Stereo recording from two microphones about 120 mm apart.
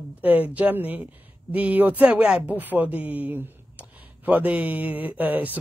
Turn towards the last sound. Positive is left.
turn(degrees=-15)  # may be behind; listen again after turning